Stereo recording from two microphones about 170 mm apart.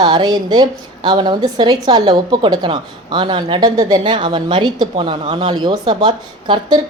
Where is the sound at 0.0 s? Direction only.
25° right (ahead or behind).